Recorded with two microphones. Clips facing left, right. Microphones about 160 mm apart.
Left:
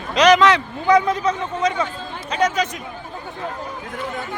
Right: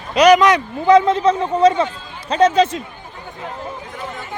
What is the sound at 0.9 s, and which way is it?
A man's voice, 25° right (ahead or behind).